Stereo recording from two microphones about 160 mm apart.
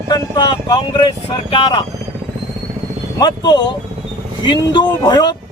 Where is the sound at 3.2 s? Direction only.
25° left (ahead or behind).